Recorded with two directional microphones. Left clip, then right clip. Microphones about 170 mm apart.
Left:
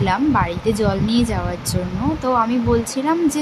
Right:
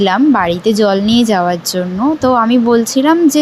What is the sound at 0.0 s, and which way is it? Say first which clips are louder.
Speech: right 7 dB; 40° right (ahead or behind).